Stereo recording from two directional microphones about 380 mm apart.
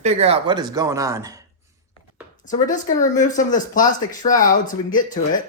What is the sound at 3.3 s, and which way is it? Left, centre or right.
Speech, centre.